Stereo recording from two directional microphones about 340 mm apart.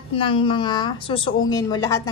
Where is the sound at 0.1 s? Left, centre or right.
Centre.